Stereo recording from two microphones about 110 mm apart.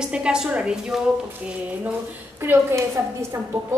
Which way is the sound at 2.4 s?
20° right (ahead or behind).